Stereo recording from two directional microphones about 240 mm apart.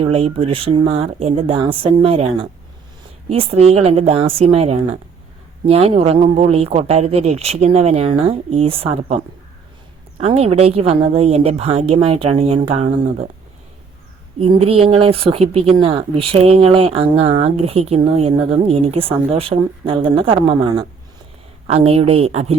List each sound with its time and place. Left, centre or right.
0.0 s speech: right
14.4 s speech: right